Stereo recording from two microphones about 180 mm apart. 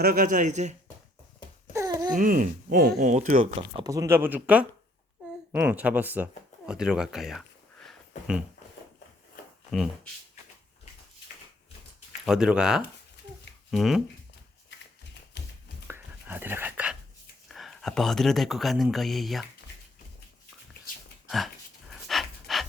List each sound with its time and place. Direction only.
0.0 s speech: 50° right (ahead or behind)
1.7 s babbling: 20° right (ahead or behind)
2.1 s speech: 50° right (ahead or behind)
3.0 s speech: 40° right (ahead or behind)
3.7 s speech: 20° right (ahead or behind); by 8.4 s centre (ahead or behind)
9.7 s speech: centre (ahead or behind)
12.2 s speech: 5° right (ahead or behind)
15.9 s whispering: 10° right (ahead or behind)
17.5 s speech: centre (ahead or behind)
21.2 s dog: centre (ahead or behind)